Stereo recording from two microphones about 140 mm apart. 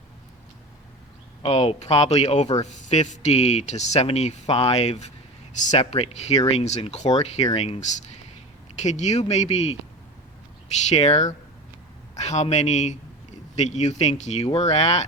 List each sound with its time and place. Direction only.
1.4 s speech: 45° left (ahead or behind)
10.8 s speech: 50° left (ahead or behind)